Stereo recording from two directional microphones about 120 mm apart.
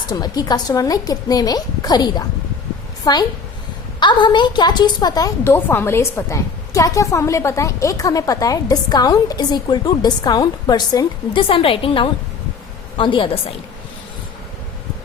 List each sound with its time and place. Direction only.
0.1 s a woman's voice: 35° left (ahead or behind)
5.5 s a woman's voice: 15° left (ahead or behind); by 13.6 s 45° left (ahead or behind)